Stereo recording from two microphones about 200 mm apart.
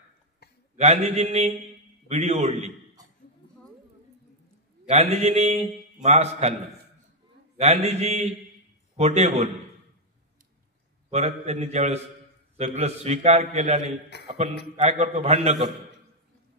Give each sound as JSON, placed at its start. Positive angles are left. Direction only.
{"t": 0.7, "sound": "a man's voice", "side_deg": -30}
{"t": 4.8, "sound": "a man's voice", "side_deg": -30}
{"t": 7.5, "sound": "a man's voice", "side_deg": -30}
{"t": 11.1, "sound": "a man's voice", "side_deg": -30}